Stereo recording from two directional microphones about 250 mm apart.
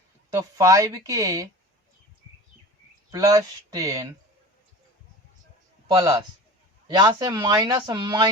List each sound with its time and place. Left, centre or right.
0.3 s speech: centre
3.1 s speech: centre
6.0 s speech: centre